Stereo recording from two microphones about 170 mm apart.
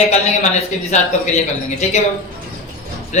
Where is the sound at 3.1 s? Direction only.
45° left (ahead or behind).